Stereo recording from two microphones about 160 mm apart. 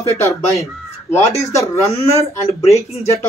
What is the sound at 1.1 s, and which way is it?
Speech, 20° left (ahead or behind).